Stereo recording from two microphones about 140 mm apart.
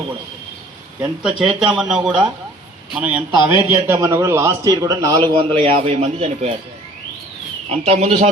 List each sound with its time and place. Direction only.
1.2 s a man's voice: 5° right (ahead or behind); by 6.5 s 50° right (ahead or behind)
7.7 s speech: 50° right (ahead or behind)